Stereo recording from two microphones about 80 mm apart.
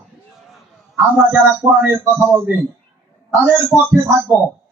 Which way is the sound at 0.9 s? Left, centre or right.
Right.